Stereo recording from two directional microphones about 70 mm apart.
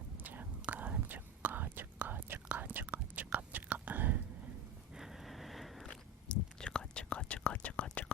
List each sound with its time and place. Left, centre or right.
0.2 s whispering: right
4.9 s a sound: centre
6.2 s whispering: centre